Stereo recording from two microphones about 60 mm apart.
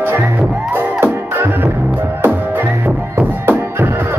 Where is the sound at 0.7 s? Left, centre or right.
Right.